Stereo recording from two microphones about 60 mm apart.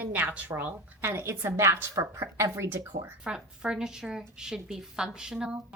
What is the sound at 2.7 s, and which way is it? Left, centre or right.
Speech, right.